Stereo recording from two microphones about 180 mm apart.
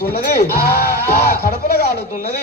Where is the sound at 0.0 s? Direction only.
55° left (ahead or behind).